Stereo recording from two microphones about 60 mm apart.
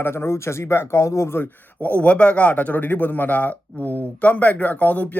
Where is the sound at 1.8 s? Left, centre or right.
Left.